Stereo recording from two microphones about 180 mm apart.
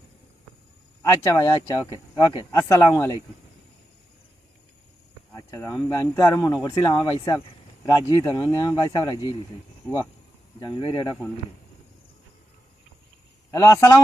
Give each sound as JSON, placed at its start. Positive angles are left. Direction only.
{"t": 1.2, "sound": "speech", "side_deg": 15}
{"t": 5.3, "sound": "a sound", "side_deg": 15}
{"t": 5.9, "sound": "speech", "side_deg": 15}
{"t": 10.6, "sound": "speech", "side_deg": 25}
{"t": 13.5, "sound": "a man's voice", "side_deg": 20}